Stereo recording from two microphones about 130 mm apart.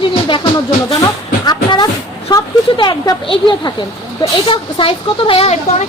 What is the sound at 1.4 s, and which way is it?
A woman's voice, 35° left (ahead or behind).